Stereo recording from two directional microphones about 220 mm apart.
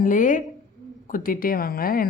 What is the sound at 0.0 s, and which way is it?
Speech, 35° left (ahead or behind).